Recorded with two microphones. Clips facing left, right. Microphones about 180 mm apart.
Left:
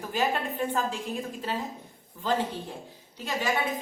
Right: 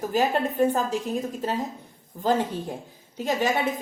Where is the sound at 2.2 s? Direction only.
40° right (ahead or behind).